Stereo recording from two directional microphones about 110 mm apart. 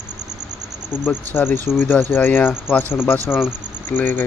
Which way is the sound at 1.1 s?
15° left (ahead or behind).